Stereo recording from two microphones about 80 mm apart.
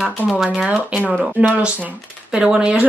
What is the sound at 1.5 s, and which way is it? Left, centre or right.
A woman's voice, centre.